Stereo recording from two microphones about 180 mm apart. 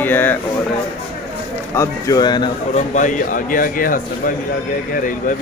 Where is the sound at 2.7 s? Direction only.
45° left (ahead or behind).